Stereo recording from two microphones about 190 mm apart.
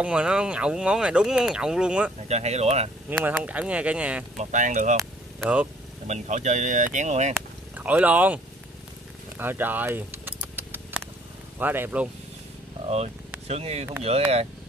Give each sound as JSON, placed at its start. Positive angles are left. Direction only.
{"t": 0.0, "sound": "speech", "side_deg": -5}
{"t": 2.2, "sound": "speech", "side_deg": -35}
{"t": 3.3, "sound": "speech", "side_deg": -5}
{"t": 4.4, "sound": "speech", "side_deg": -40}
{"t": 4.9, "sound": "speech", "side_deg": -10}
{"t": 6.0, "sound": "speech", "side_deg": -40}
{"t": 7.7, "sound": "speech", "side_deg": -10}
{"t": 9.4, "sound": "keys jangling", "side_deg": -10}
{"t": 11.5, "sound": "speech", "side_deg": -10}
{"t": 12.8, "sound": "speech", "side_deg": -35}